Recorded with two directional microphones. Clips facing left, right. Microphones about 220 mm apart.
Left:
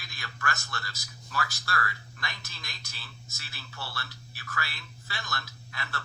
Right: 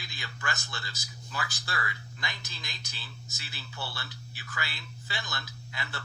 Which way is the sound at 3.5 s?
15° right (ahead or behind).